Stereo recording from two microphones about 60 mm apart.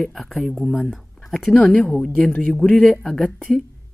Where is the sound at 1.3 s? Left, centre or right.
Centre.